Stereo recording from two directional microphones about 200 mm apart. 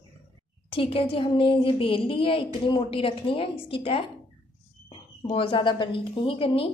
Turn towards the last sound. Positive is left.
turn(degrees=30)  # may be behind; listen again after turning